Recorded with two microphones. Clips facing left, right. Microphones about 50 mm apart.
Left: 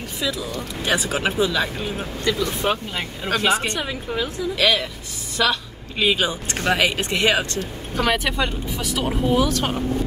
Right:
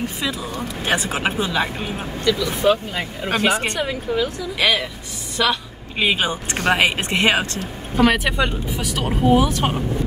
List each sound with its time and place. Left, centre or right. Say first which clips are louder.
0.2 s speech: right 1 dB; right
2.2 s speech: right 4 dB; left
3.3 s speech: right 1 dB; right
4.6 s a woman's voice: right 1 dB; centre
5.9 s speech: right 1 dB; right
7.9 s speech: right 4 dB; centre